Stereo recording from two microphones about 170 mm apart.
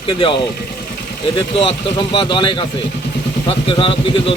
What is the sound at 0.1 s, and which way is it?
Speech, 30° left (ahead or behind).